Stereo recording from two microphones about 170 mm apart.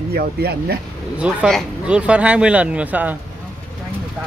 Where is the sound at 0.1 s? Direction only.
65° right (ahead or behind).